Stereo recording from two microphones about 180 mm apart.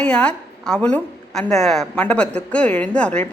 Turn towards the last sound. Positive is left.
turn(degrees=5)  # may be behind; listen again after turning